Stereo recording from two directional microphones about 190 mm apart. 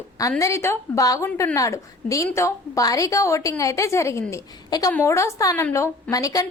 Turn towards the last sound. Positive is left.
turn(degrees=20)  # may be behind; listen again after turning